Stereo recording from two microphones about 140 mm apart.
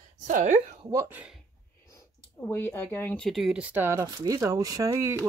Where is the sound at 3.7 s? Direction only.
15° right (ahead or behind).